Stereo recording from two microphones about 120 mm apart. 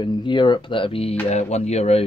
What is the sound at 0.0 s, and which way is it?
Speech, 40° left (ahead or behind).